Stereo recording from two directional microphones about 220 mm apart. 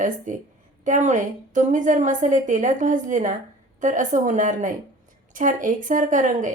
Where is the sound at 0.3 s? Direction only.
35° right (ahead or behind).